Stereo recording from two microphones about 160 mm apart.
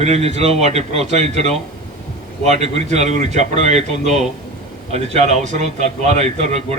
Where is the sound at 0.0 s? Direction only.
45° right (ahead or behind).